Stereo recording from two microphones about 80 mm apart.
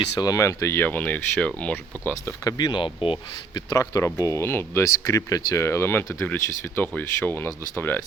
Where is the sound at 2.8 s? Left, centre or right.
Left.